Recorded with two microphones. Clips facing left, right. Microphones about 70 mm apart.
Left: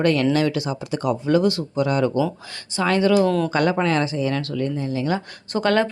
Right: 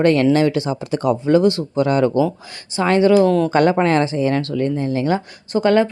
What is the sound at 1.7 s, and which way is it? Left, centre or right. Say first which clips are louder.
Speech: right 4 dB; right.